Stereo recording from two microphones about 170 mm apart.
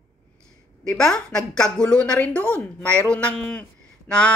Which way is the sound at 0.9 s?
5° left (ahead or behind).